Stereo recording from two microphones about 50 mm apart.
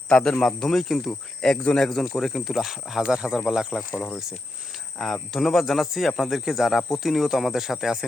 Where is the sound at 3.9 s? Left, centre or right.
Left.